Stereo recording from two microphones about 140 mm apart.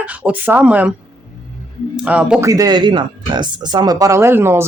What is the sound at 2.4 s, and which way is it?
Speech, 25° right (ahead or behind).